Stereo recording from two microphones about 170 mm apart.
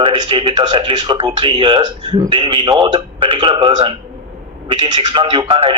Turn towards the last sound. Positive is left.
turn(degrees=-30)  # may be behind; listen again after turning